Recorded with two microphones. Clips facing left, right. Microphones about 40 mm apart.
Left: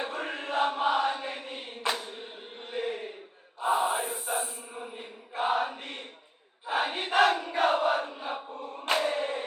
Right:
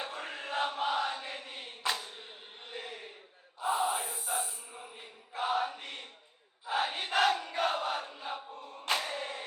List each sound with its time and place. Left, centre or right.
0.1 s chant: left
3.6 s mantra: left
5.3 s chant: left
6.7 s crowd: centre
8.9 s chant: left